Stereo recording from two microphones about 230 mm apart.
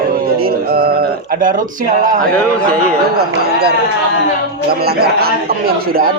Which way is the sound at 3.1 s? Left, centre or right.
Right.